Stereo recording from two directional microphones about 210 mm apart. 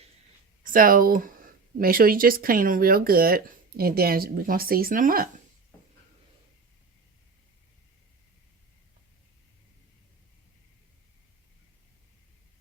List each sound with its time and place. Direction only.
0.6 s speech: 40° right (ahead or behind)